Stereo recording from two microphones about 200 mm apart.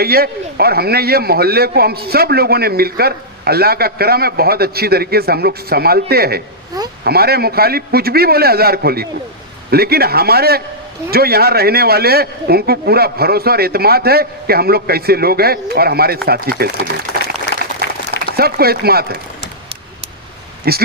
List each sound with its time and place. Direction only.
0.0 s a man's voice: 50° right (ahead or behind)
17.5 s applause: 60° left (ahead or behind)
18.3 s a man's voice: 50° right (ahead or behind)
20.7 s a man's voice: 50° right (ahead or behind)